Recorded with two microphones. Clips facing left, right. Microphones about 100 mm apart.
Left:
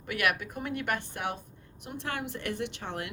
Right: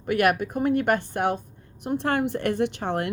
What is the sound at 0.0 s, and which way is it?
A woman's voice, 40° right (ahead or behind).